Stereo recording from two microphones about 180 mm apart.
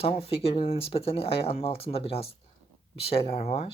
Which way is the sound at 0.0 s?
35° left (ahead or behind).